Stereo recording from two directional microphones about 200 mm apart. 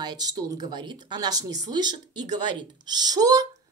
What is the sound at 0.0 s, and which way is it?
A woman's voice, 20° right (ahead or behind).